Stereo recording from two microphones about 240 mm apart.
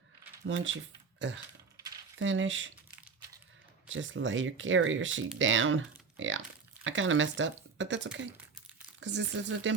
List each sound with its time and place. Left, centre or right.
0.4 s speech: right
2.1 s speech: right
3.8 s speech: right